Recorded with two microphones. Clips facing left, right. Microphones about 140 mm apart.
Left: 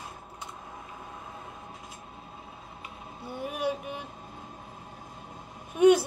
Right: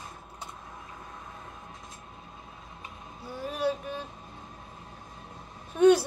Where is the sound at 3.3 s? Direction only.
15° left (ahead or behind).